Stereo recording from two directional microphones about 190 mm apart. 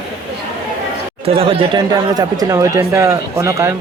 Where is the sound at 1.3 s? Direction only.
30° right (ahead or behind).